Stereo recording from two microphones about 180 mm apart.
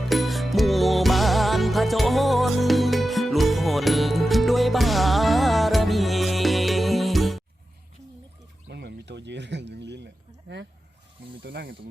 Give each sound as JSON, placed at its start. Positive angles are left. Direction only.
{"t": 0.1, "sound": "music", "side_deg": 0}
{"t": 8.7, "sound": "a sound", "side_deg": -65}
{"t": 11.4, "sound": "rub", "side_deg": -70}